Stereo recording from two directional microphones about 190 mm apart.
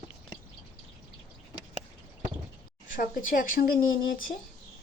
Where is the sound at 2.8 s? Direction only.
45° left (ahead or behind).